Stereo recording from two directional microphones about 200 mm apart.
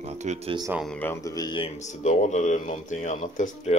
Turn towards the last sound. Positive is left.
turn(degrees=40)  # may be behind; listen again after turning